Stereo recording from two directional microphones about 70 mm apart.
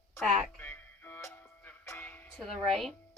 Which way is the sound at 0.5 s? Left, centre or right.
Left.